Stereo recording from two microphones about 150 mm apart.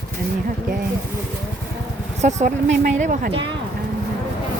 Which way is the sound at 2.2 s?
50° right (ahead or behind).